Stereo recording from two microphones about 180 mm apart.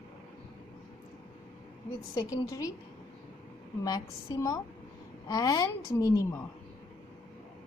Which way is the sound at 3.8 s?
20° left (ahead or behind).